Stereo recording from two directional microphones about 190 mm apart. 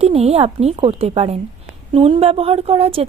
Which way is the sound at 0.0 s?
35° right (ahead or behind).